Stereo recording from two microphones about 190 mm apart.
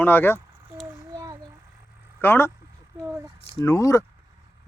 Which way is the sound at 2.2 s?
10° left (ahead or behind).